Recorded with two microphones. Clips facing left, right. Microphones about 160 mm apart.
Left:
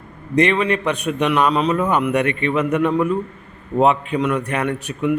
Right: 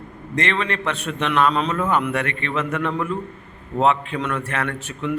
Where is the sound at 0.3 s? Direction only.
15° left (ahead or behind).